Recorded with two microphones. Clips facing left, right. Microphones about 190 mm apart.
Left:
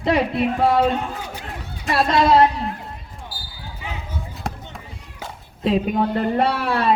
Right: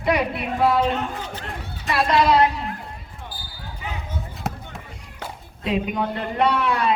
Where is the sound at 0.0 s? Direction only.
25° left (ahead or behind).